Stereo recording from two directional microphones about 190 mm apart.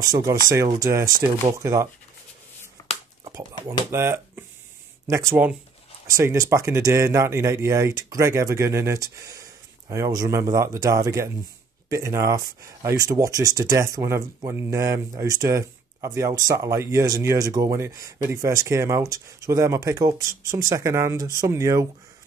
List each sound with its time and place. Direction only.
0.0 s speech: 20° right (ahead or behind)
3.3 s speech: 20° right (ahead or behind)